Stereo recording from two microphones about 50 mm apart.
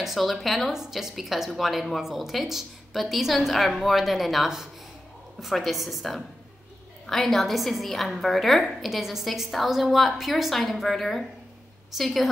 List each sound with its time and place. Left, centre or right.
0.0 s a woman's voice: centre